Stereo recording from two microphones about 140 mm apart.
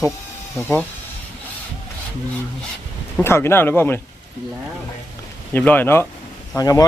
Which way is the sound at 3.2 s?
15° left (ahead or behind).